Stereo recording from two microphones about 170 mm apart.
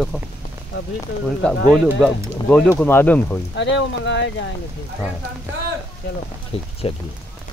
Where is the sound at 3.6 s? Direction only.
90° left.